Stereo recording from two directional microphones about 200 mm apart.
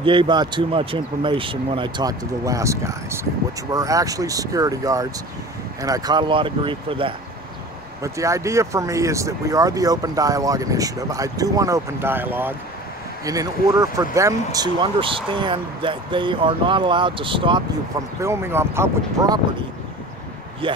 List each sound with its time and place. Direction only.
0.0 s speech: 25° right (ahead or behind)
8.0 s speech: 15° right (ahead or behind)
18.2 s speech: 15° right (ahead or behind)